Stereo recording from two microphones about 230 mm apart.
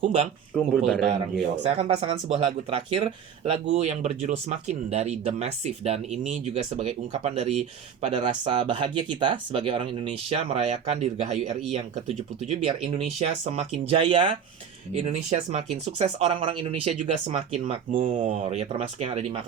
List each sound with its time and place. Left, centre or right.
0.5 s speech: centre
1.8 s speech: right